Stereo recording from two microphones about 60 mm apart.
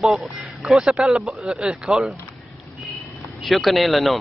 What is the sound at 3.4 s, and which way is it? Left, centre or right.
Speech, centre.